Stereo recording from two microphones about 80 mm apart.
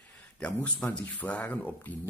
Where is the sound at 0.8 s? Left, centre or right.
Centre.